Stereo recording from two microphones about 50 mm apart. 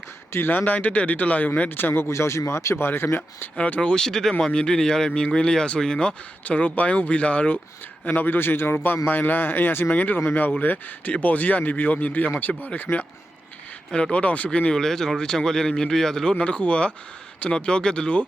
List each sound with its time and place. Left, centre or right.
0.3 s speech: left
0.6 s speech: left
1.7 s speech: left
2.1 s speech: left
2.8 s speech: left
3.6 s speech: left
6.4 s speech: left
8.0 s a man's voice: left
14.7 s speech: centre
16.4 s speech: left